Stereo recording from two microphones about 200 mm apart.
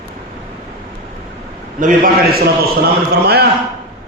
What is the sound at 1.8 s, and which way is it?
A man's voice, 45° right (ahead or behind).